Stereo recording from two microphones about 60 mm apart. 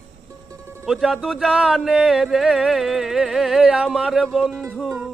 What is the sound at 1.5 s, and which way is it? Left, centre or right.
Speech, centre.